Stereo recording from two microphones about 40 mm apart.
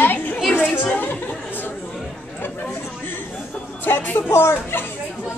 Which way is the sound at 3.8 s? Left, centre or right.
Left.